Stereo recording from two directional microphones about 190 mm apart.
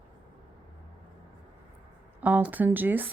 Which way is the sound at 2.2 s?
10° right (ahead or behind).